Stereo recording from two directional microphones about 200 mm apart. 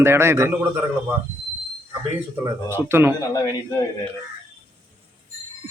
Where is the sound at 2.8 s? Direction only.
10° right (ahead or behind).